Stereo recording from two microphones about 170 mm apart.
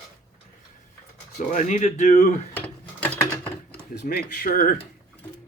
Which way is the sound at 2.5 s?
10° left (ahead or behind).